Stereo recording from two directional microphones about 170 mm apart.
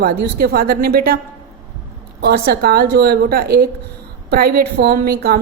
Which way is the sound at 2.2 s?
65° right (ahead or behind).